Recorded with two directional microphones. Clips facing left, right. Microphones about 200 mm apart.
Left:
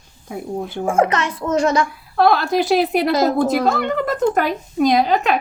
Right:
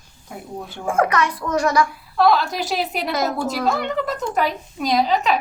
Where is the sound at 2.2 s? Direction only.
55° left (ahead or behind).